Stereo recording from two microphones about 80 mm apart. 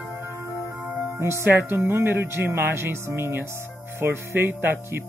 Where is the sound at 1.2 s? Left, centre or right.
Right.